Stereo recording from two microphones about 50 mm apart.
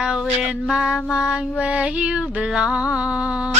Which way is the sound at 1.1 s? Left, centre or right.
Right.